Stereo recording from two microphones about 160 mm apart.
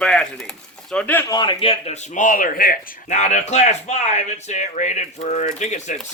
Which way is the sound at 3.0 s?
45° left (ahead or behind).